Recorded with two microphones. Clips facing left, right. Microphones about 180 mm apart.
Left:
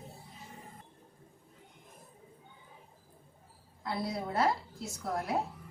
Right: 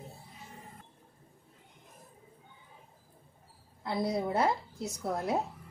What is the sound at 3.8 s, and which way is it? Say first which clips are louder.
A woman's voice: right 4 dB; 20° right (ahead or behind).